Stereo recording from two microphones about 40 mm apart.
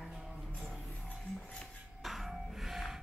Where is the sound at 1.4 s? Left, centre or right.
Left.